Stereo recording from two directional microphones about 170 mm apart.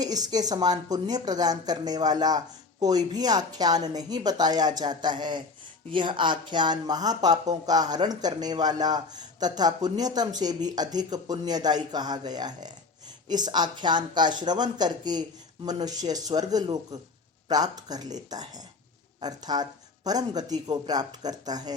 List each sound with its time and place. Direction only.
0.0 s speech: 20° right (ahead or behind)